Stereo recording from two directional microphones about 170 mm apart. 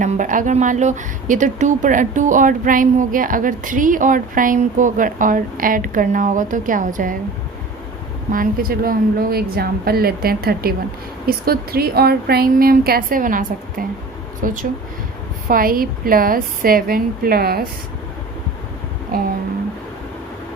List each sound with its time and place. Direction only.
0.0 s speech: 50° right (ahead or behind)
8.3 s a woman's voice: 55° right (ahead or behind)
19.1 s a woman's voice: 55° right (ahead or behind)